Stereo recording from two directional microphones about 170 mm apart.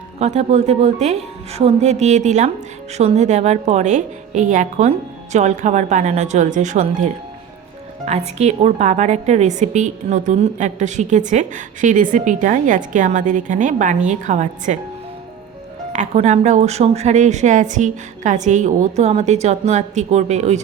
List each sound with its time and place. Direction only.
0.2 s a woman's voice: 40° right (ahead or behind)
15.9 s a woman's voice: 45° right (ahead or behind)